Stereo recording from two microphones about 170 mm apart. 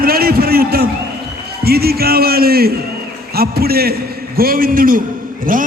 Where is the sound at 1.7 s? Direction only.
65° right (ahead or behind).